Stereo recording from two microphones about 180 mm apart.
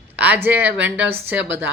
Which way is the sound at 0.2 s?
10° right (ahead or behind).